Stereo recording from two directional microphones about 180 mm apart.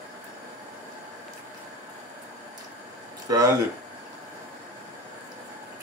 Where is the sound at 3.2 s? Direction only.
20° right (ahead or behind).